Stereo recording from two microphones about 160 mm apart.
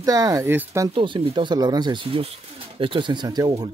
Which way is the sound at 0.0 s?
20° right (ahead or behind).